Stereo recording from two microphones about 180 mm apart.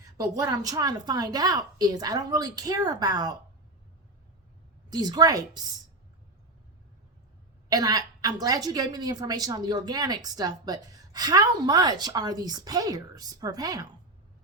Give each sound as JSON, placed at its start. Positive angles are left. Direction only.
{"t": 0.0, "sound": "a woman's voice", "side_deg": -20}
{"t": 4.9, "sound": "a woman's voice", "side_deg": -20}
{"t": 7.7, "sound": "a woman's voice", "side_deg": -20}